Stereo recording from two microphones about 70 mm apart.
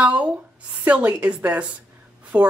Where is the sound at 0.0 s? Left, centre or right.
Centre.